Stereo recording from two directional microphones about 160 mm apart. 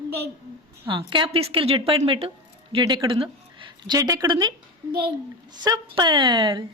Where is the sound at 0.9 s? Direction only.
30° right (ahead or behind).